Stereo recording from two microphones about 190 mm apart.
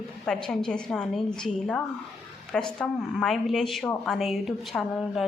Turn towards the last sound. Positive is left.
turn(degrees=0)  # may be behind; listen again after turning